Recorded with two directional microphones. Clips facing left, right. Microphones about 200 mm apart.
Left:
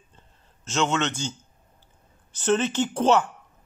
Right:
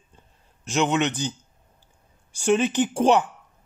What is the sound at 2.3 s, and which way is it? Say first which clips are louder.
Speech: right 2 dB; 15° right (ahead or behind).